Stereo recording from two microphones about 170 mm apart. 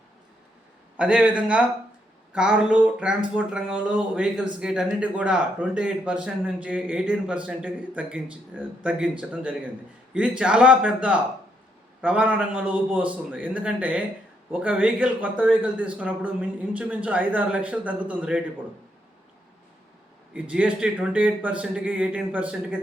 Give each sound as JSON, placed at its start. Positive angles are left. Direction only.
{"t": 0.9, "sound": "a man's voice", "side_deg": -5}
{"t": 20.3, "sound": "a man's voice", "side_deg": -5}